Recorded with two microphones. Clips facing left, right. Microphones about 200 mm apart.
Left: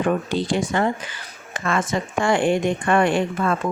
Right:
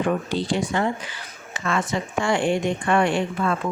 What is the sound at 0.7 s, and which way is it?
A woman's voice, 50° left (ahead or behind).